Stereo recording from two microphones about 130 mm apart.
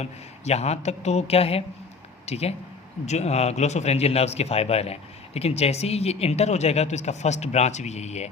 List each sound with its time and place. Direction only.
0.0 s a man's voice: 55° left (ahead or behind)